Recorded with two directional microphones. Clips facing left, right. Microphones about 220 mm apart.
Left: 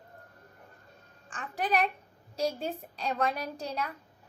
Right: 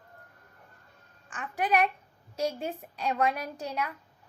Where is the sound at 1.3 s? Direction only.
35° left (ahead or behind).